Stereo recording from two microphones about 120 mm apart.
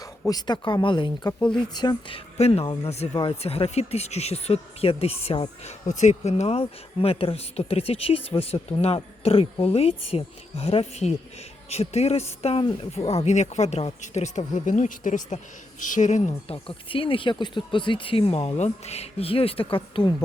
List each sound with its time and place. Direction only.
0.0 s speech: 30° left (ahead or behind)
1.3 s speech: 10° left (ahead or behind)
1.7 s speech: 35° left (ahead or behind); by 16.3 s 85° left
16.5 s speech: 50° left (ahead or behind)